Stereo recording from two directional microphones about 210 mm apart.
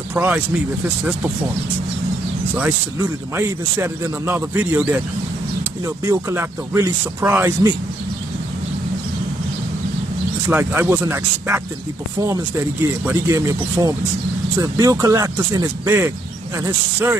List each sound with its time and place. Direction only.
0.1 s speech: 10° right (ahead or behind)
2.5 s speech: 10° right (ahead or behind)
10.5 s speech: 10° right (ahead or behind)
13.0 s speech: 10° right (ahead or behind)